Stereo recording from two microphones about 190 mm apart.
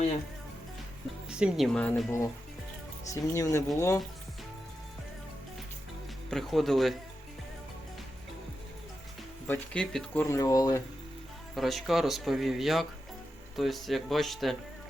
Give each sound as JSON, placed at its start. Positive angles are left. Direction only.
{"t": 1.3, "sound": "speech", "side_deg": -5}
{"t": 6.3, "sound": "speech", "side_deg": 0}
{"t": 9.5, "sound": "speech", "side_deg": 5}
{"t": 10.2, "sound": "speech", "side_deg": 15}
{"t": 11.5, "sound": "speech", "side_deg": 0}